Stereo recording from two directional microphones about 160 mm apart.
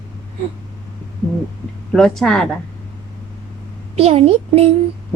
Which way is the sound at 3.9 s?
40° right (ahead or behind).